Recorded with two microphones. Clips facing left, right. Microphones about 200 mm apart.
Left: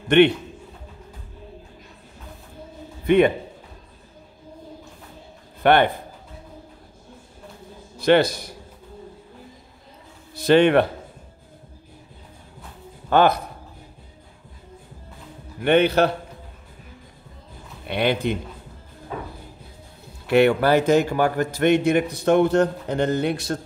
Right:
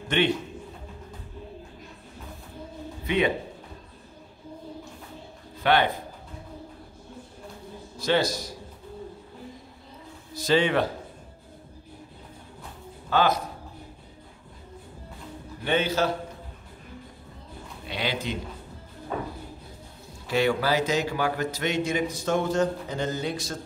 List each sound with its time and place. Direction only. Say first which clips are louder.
0.1 s a man's voice: left 10 dB; 65° left (ahead or behind)
3.1 s a man's voice: left 8 dB; 55° left (ahead or behind)
5.6 s speech: left 6 dB; 55° left (ahead or behind)
8.0 s a man's voice: left 7 dB; 60° left (ahead or behind)
10.3 s a man's voice: left 7 dB; 60° left (ahead or behind)
13.1 s a man's voice: left 6 dB; 55° left (ahead or behind)
15.6 s a man's voice: left 8 dB; 60° left (ahead or behind)
17.8 s a man's voice: left 8 dB; 60° left (ahead or behind)
20.2 s a man's voice: left 7 dB; 60° left (ahead or behind)